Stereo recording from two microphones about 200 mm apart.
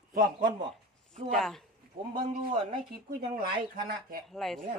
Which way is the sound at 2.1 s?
25° right (ahead or behind).